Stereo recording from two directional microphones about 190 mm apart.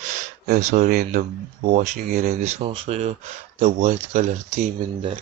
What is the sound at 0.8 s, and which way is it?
Speech, 50° right (ahead or behind).